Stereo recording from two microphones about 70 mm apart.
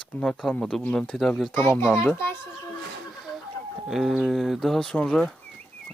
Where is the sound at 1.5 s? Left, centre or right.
Left.